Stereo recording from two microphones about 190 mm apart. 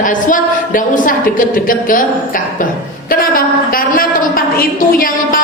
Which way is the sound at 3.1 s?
50° left (ahead or behind).